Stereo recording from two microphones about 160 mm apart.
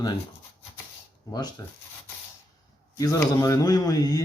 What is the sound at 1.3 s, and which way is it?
Speech, 20° left (ahead or behind).